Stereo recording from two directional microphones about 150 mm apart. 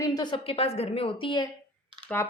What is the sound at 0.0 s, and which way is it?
Speech, 25° left (ahead or behind).